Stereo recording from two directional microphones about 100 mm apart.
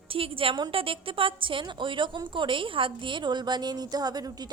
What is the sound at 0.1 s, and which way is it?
A woman's voice, 65° right (ahead or behind).